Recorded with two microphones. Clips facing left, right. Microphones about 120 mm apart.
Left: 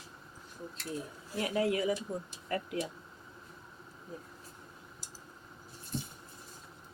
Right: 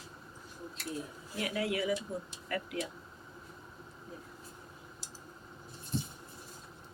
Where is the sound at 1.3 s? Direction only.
30° left (ahead or behind).